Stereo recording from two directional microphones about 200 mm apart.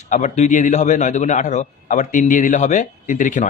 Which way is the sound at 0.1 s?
35° left (ahead or behind).